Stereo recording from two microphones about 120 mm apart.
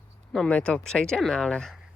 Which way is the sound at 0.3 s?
10° left (ahead or behind).